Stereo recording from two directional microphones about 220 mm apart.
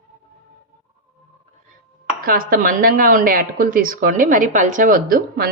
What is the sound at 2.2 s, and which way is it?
A woman's voice, 40° right (ahead or behind).